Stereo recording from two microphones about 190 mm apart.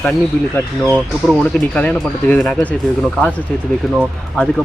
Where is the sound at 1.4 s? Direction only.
5° left (ahead or behind).